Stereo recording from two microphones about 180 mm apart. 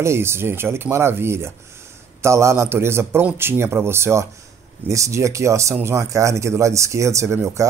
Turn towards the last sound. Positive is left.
turn(degrees=-15)  # may be behind; listen again after turning